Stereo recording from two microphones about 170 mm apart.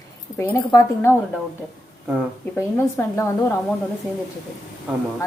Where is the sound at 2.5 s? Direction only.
15° left (ahead or behind).